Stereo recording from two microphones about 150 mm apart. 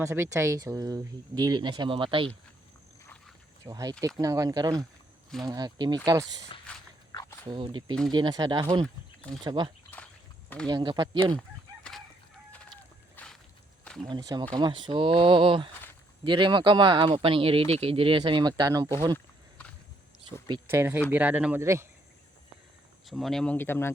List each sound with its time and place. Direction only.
0.0 s speech: 15° right (ahead or behind); by 2.3 s 35° right (ahead or behind)
3.7 s speech: 25° right (ahead or behind)
6.7 s mechanisms: 10° left (ahead or behind)
7.1 s walk: 25° left (ahead or behind)
7.5 s speech: 35° right (ahead or behind)
11.3 s crowing: 5° left (ahead or behind)
12.5 s chicken: 10° left (ahead or behind)
13.8 s a sound: 5° left (ahead or behind)
14.1 s speech: 30° right (ahead or behind)
19.1 s a sound: 10° left (ahead or behind)
20.7 s speech: 15° right (ahead or behind)
23.0 s speech: centre (ahead or behind)